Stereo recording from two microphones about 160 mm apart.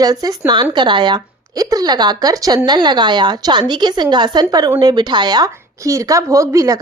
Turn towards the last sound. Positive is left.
turn(degrees=-20)  # may be behind; listen again after turning